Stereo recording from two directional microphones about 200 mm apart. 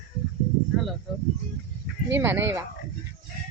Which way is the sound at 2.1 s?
10° right (ahead or behind).